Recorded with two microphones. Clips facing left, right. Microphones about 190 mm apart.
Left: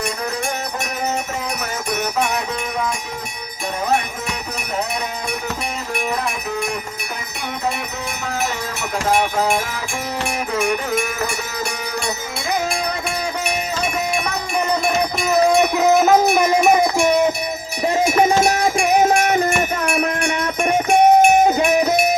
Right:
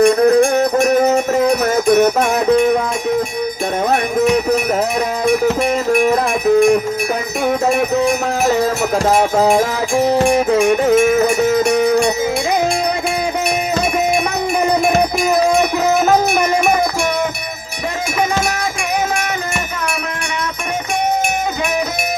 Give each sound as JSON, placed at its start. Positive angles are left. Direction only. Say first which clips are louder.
{"t": 0.0, "sound": "music", "louder": "right 15 dB", "side_deg": -50}
{"t": 9.0, "sound": "a sound", "louder": "right 4 dB", "side_deg": -40}
{"t": 10.2, "sound": "wind chime", "louder": "right 6 dB", "side_deg": -35}